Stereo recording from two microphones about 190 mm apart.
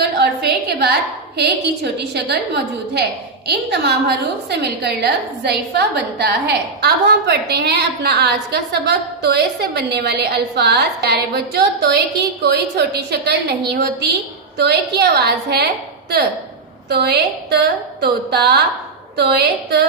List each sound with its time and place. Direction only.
0.2 s a woman's voice: 60° right (ahead or behind)